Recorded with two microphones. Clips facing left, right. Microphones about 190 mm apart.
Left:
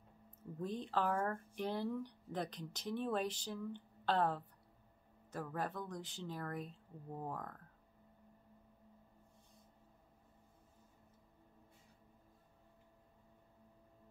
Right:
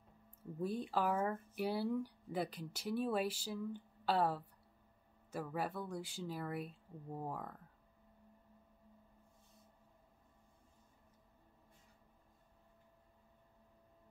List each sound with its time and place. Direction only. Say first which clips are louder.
0.6 s speech: right 1 dB; 10° right (ahead or behind)